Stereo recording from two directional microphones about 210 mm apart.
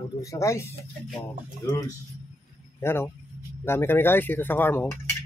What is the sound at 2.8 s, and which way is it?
Speech, 10° left (ahead or behind).